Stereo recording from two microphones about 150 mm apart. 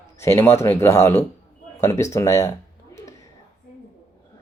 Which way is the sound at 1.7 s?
20° left (ahead or behind).